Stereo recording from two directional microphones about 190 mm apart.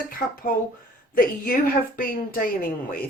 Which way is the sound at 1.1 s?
50° left (ahead or behind).